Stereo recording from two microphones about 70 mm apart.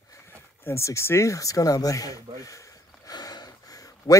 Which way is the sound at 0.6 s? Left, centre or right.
Left.